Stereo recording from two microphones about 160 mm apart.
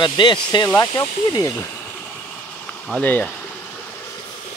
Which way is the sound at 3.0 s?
10° left (ahead or behind).